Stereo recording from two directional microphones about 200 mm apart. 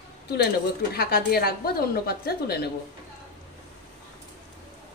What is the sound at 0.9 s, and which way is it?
A woman's voice, 50° left (ahead or behind).